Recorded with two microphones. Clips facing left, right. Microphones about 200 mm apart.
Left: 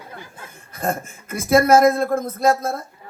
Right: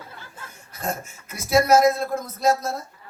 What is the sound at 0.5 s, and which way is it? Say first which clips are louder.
A man's voice: left 5 dB; 55° left (ahead or behind).